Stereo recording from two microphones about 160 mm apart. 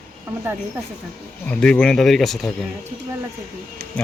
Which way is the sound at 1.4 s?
5° left (ahead or behind).